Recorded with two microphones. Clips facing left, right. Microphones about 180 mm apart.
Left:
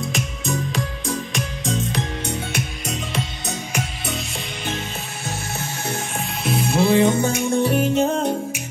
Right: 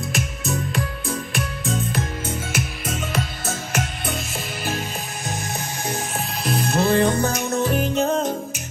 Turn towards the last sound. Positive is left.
turn(degrees=0)  # may be behind; listen again after turning